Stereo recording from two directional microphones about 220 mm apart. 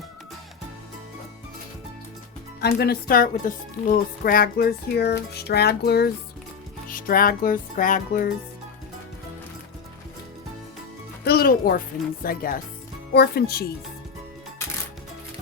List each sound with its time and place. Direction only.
2.6 s music: 45° left (ahead or behind)
7.1 s music: 40° left (ahead or behind)
11.2 s music: 45° left (ahead or behind)